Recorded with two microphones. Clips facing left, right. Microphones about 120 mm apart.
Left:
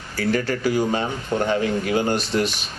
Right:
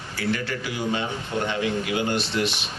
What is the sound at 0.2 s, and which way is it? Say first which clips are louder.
A man's voice: left 6 dB; 40° left (ahead or behind).